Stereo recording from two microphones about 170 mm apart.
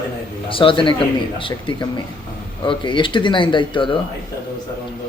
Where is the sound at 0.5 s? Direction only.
30° left (ahead or behind).